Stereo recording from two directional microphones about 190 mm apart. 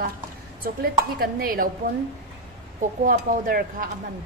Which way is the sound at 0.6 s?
50° right (ahead or behind).